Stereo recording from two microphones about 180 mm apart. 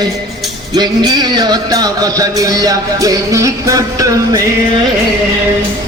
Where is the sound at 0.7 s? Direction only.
25° right (ahead or behind).